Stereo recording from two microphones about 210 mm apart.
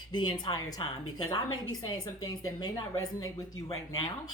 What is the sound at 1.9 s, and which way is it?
A woman's voice, 20° left (ahead or behind).